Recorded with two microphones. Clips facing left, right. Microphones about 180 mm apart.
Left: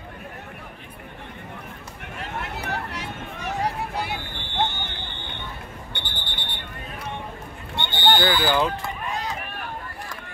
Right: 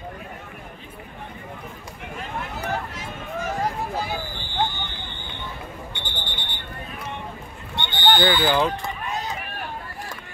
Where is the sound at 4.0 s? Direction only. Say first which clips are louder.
Right 1 dB; 70° left (ahead or behind).